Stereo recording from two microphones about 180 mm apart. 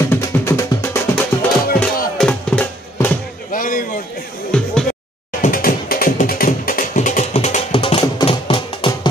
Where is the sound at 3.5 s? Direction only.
50° left (ahead or behind).